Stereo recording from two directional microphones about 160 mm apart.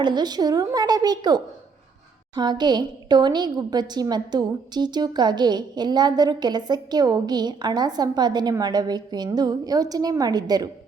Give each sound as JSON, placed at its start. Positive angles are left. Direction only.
{"t": 0.0, "sound": "a woman's voice", "side_deg": -25}